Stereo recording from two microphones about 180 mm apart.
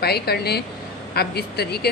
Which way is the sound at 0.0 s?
60° left (ahead or behind).